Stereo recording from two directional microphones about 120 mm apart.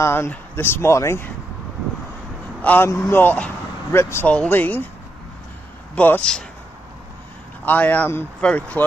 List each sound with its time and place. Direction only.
0.0 s speech: 20° left (ahead or behind)
2.6 s a man's voice: 15° left (ahead or behind)
5.9 s speech: 10° left (ahead or behind)
7.6 s speech: 15° left (ahead or behind)